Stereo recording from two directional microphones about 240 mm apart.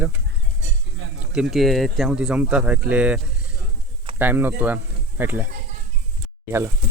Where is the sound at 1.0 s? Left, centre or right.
Right.